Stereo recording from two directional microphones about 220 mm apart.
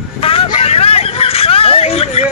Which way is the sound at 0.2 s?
25° left (ahead or behind).